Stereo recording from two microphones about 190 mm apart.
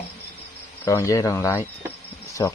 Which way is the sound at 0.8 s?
15° left (ahead or behind).